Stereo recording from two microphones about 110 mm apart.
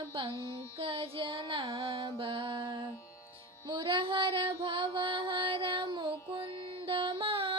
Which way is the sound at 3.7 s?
55° right (ahead or behind).